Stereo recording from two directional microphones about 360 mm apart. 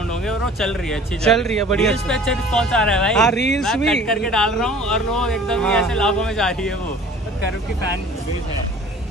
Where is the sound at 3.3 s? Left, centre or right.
Left.